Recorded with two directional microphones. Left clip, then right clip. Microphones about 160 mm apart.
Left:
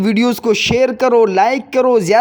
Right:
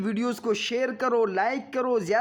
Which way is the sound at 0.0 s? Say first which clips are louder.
Left 13 dB; 30° left (ahead or behind).